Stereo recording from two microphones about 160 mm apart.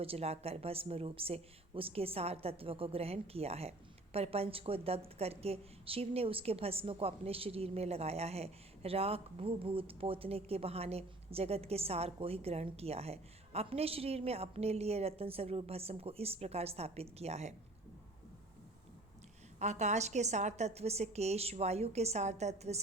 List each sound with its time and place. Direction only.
0.0 s speech: 40° right (ahead or behind)
19.5 s a woman's voice: 45° right (ahead or behind)